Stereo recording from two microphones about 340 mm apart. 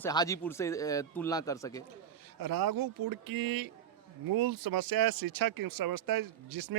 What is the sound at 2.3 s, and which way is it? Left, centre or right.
Speech, right.